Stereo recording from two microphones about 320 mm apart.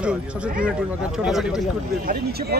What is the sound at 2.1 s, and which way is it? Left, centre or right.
Speech, right.